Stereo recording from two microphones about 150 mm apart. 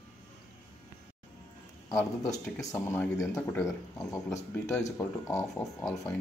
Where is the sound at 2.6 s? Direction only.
20° left (ahead or behind).